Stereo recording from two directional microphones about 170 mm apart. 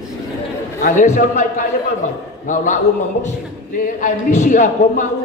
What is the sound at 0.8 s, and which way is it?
A man's voice, 45° left (ahead or behind).